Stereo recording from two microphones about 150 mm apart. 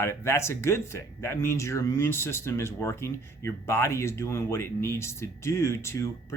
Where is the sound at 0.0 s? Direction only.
15° left (ahead or behind).